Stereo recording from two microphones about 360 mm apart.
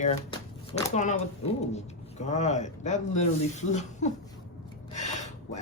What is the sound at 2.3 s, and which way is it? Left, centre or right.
Speech, centre.